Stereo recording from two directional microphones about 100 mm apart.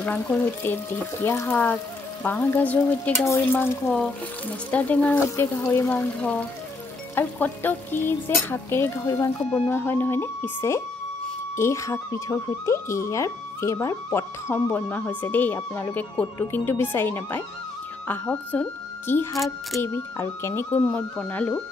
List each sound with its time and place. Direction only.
0.0 s speech: 15° left (ahead or behind)
1.2 s speech: 25° left (ahead or behind)
1.5 s speech: 15° left (ahead or behind)
5.2 s speech: 30° left (ahead or behind)
20.8 s speech: 10° left (ahead or behind)